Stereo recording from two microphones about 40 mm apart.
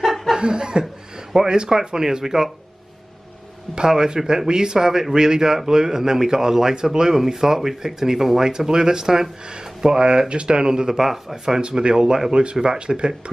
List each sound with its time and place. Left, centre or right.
0.0 s snicker: centre
0.4 s a man's voice: centre
3.7 s a man's voice: centre
11.6 s a man's voice: right